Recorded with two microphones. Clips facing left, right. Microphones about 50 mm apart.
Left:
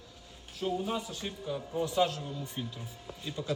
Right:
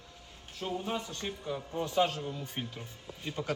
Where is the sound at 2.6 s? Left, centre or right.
Right.